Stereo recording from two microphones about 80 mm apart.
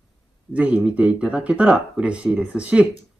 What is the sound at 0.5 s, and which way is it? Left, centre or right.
Speech, centre.